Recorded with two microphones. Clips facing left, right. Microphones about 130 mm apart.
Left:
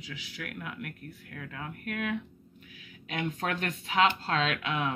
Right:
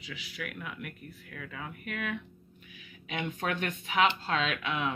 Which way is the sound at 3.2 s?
35° left (ahead or behind).